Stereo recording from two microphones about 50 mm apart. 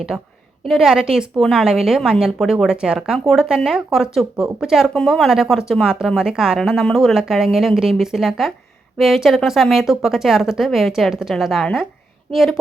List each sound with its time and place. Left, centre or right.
0.1 s a woman's voice: centre
1.4 s speech: centre
1.6 s a woman's voice: centre
5.0 s speech: centre
5.3 s a woman's voice: centre
6.6 s speech: centre